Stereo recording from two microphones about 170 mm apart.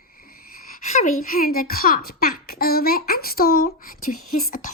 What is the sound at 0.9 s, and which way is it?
A child's voice, 50° left (ahead or behind).